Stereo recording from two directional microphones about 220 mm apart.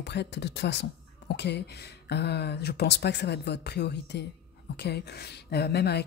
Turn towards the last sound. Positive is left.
turn(degrees=45)  # may be behind; listen again after turning